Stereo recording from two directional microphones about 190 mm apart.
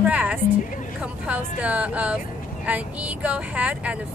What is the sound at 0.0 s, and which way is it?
Music, 10° right (ahead or behind).